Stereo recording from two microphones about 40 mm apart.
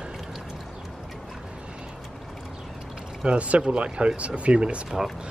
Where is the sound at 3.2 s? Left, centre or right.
Right.